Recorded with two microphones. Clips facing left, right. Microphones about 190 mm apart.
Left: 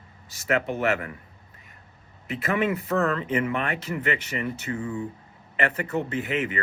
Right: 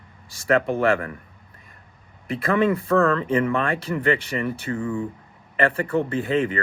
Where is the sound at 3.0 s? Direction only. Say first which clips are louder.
Right 5 dB; 20° left (ahead or behind).